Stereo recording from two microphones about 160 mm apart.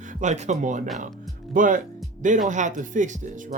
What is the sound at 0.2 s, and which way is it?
Speech, 45° right (ahead or behind).